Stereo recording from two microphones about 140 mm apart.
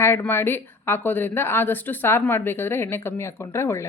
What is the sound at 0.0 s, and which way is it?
A woman's voice, 15° left (ahead or behind).